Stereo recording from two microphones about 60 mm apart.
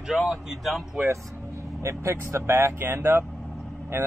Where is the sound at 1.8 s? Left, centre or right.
Right.